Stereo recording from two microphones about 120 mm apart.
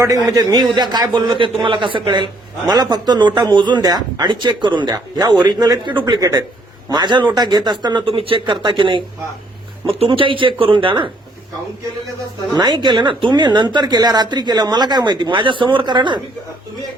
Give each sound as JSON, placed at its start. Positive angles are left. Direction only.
{"t": 0.0, "sound": "a man's voice", "side_deg": -30}
{"t": 12.5, "sound": "a man's voice", "side_deg": -40}